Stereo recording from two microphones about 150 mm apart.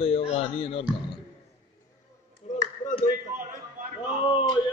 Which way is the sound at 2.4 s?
45° left (ahead or behind).